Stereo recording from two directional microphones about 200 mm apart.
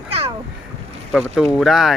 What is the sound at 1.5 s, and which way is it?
Speech, centre (ahead or behind).